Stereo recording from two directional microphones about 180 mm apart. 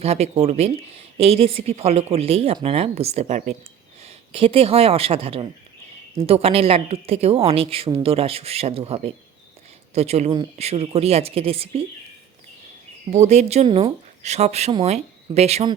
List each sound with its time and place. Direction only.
0.0 s speech: 35° right (ahead or behind)
4.0 s speech: 30° right (ahead or behind)
13.1 s speech: 40° right (ahead or behind)